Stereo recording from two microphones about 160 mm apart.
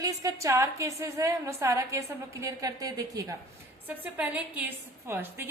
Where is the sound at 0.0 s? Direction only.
20° right (ahead or behind).